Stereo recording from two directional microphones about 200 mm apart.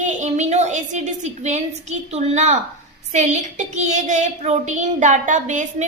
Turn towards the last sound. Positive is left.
turn(degrees=-40)  # may be behind; listen again after turning